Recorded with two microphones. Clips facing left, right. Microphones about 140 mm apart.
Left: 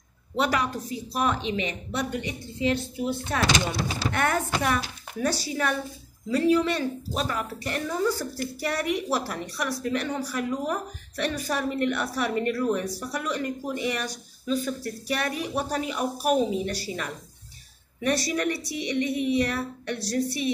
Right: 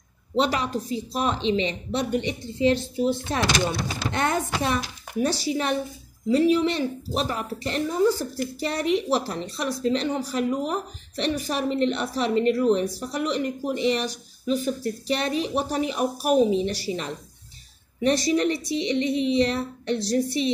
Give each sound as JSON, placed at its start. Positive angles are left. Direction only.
{"t": 0.4, "sound": "a woman's voice", "side_deg": -25}